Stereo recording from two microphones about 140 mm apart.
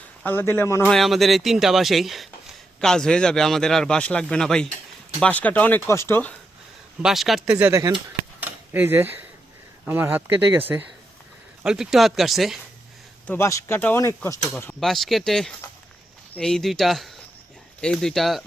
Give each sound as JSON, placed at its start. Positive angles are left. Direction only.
{"t": 0.3, "sound": "speech", "side_deg": 15}
{"t": 0.9, "sound": "speech", "side_deg": 0}
{"t": 7.0, "sound": "speech", "side_deg": 0}
{"t": 7.7, "sound": "speech", "side_deg": -25}
{"t": 8.4, "sound": "a sound", "side_deg": -10}
{"t": 9.8, "sound": "speech", "side_deg": -15}
{"t": 11.6, "sound": "speech", "side_deg": -5}
{"t": 13.2, "sound": "speech", "side_deg": 15}
{"t": 14.8, "sound": "speech", "side_deg": 0}